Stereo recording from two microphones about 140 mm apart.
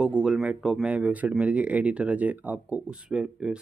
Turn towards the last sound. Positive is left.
turn(degrees=-5)  # may be behind; listen again after turning